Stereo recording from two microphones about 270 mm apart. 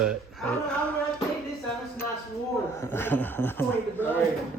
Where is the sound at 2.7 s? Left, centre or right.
Centre.